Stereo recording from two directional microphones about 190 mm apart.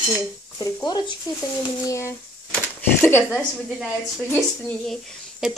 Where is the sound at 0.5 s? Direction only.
20° left (ahead or behind).